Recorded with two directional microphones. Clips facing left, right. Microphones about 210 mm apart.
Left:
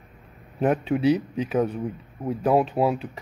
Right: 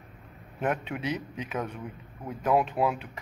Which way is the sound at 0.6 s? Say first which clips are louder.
Left 8 dB; 35° left (ahead or behind).